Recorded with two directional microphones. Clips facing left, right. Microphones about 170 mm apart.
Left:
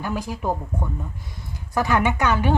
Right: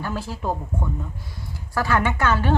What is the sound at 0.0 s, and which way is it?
Speech, 15° left (ahead or behind).